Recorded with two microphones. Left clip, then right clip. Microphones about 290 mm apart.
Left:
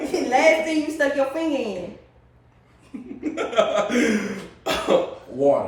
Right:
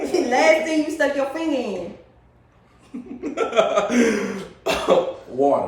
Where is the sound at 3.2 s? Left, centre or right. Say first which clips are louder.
Right 2 dB; centre.